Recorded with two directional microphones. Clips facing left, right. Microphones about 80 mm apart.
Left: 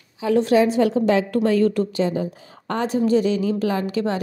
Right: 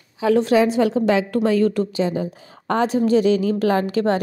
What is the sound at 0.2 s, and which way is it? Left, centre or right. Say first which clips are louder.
Speech: right 1 dB; right.